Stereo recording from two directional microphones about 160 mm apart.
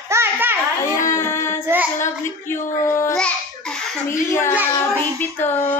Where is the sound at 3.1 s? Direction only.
5° left (ahead or behind).